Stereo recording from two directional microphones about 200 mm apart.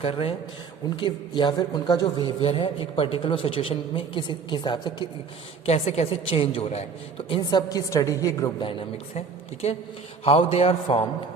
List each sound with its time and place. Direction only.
0.0 s a woman's voice: 30° left (ahead or behind)